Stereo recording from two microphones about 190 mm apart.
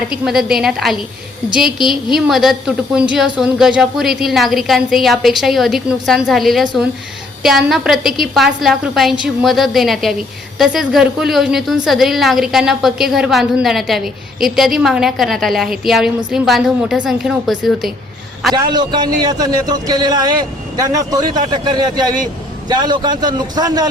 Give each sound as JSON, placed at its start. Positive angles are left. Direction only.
{"t": 0.3, "sound": "a woman's voice", "side_deg": 0}
{"t": 18.5, "sound": "a man's voice", "side_deg": -20}